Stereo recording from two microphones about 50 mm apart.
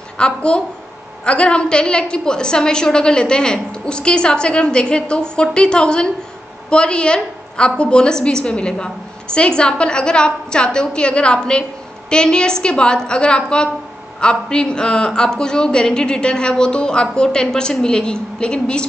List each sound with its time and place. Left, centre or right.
0.2 s a woman's voice: left